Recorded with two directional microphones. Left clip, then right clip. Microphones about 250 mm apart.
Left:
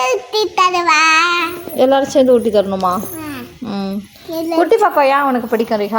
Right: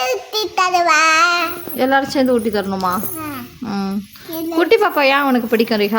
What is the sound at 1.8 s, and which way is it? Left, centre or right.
Speech, centre.